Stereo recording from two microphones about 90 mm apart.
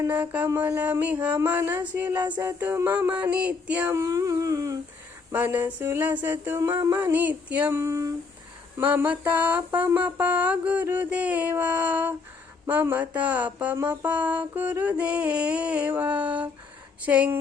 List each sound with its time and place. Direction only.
0.1 s music: 20° right (ahead or behind)
1.9 s mantra: 20° right (ahead or behind)
2.6 s music: 25° right (ahead or behind)
3.9 s humming: 35° right (ahead or behind)
5.3 s music: 20° right (ahead or behind)
8.8 s mantra: 20° right (ahead or behind)